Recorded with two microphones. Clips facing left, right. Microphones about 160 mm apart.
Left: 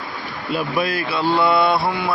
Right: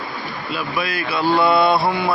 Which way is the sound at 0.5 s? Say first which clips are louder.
Left 4 dB; 45° left (ahead or behind).